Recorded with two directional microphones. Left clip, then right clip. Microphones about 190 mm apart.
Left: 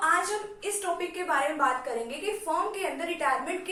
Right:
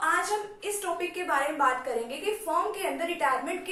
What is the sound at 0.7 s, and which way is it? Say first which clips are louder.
A woman's voice: left 1 dB; centre (ahead or behind).